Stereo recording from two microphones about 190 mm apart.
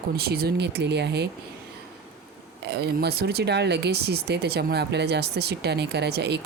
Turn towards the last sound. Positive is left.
turn(degrees=-60)  # may be behind; listen again after turning